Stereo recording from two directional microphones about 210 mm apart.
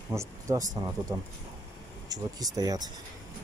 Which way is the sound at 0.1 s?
15° right (ahead or behind).